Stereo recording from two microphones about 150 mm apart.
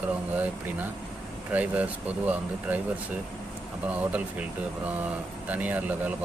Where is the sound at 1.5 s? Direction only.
10° right (ahead or behind).